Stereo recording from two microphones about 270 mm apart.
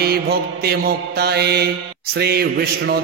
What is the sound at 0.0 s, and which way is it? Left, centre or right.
Mantra, right.